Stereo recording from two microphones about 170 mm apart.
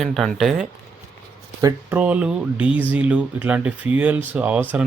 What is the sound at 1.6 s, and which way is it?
Speech, 20° right (ahead or behind).